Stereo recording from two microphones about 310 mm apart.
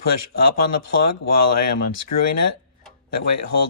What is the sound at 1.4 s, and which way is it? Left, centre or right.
Speech, left.